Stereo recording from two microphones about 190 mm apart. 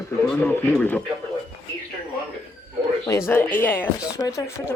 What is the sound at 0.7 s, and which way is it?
Speech, 10° left (ahead or behind).